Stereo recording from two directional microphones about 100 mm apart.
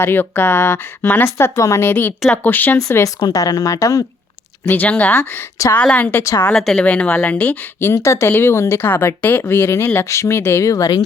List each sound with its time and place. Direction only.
0.0 s speech: 20° left (ahead or behind)
2.7 s speech: 30° left (ahead or behind)
3.2 s speech: 45° left (ahead or behind)
4.6 s speech: 15° left (ahead or behind)
6.5 s speech: 5° left (ahead or behind)
7.8 s speech: 25° left (ahead or behind)